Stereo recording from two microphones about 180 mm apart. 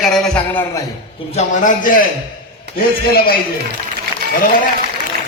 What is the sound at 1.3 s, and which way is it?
A man's voice, 50° left (ahead or behind).